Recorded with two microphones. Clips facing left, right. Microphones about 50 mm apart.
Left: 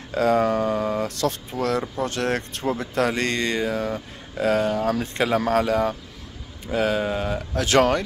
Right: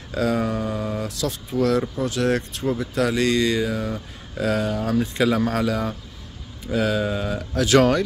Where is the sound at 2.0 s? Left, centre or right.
Left.